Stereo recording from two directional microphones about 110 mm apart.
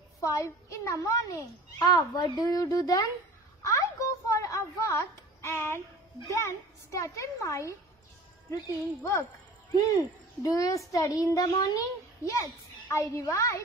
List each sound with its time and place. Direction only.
0.2 s a child's voice: 30° left (ahead or behind)
2.1 s a child's voice: 40° left (ahead or behind)
3.6 s a sound: 30° left (ahead or behind)
6.2 s a child's voice: 25° left (ahead or behind)
10.4 s a child's voice: 30° left (ahead or behind)